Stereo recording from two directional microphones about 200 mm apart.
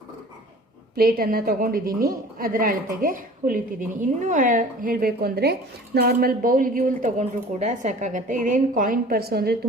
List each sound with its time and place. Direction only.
0.9 s a woman's voice: 50° right (ahead or behind)